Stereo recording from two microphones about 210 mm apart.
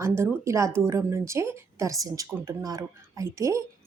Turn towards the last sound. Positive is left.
turn(degrees=-15)  # may be behind; listen again after turning